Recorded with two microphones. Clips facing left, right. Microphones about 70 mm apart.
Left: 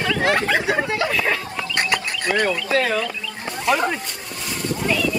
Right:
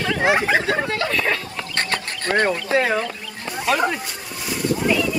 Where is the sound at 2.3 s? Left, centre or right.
Right.